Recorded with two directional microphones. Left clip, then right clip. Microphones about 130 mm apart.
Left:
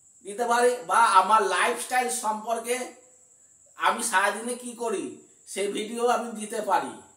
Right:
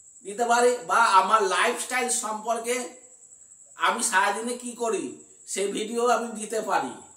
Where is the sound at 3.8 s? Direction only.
25° right (ahead or behind).